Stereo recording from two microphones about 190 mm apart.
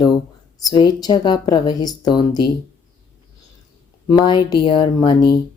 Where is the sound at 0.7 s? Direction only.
20° left (ahead or behind).